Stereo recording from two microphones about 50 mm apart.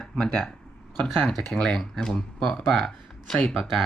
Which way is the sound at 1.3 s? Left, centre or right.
Centre.